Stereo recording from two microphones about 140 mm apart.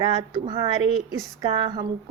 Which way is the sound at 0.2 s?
30° right (ahead or behind).